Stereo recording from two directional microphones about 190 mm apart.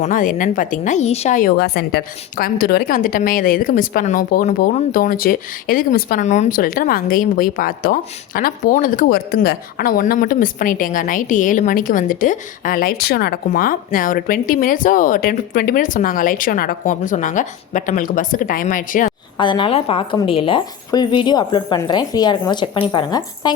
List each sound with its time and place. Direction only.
0.0 s a woman's voice: 45° left (ahead or behind)
19.4 s speech: 25° left (ahead or behind)